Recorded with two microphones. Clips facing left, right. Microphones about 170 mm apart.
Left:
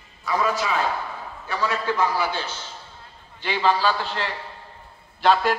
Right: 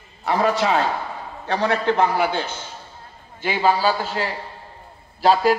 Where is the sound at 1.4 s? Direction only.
70° right (ahead or behind).